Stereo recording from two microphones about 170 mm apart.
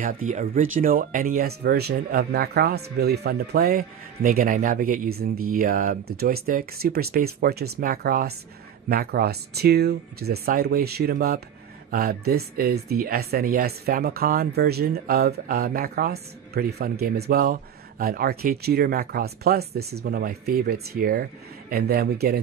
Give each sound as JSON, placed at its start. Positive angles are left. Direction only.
{"t": 0.0, "sound": "speech", "side_deg": -45}